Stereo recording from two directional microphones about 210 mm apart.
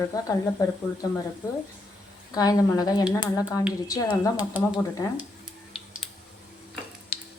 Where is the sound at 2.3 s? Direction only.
15° left (ahead or behind).